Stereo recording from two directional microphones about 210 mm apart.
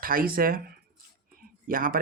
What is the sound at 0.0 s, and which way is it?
Speech, 45° right (ahead or behind).